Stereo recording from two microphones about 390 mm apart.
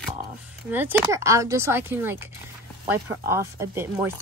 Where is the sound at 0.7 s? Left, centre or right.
Centre.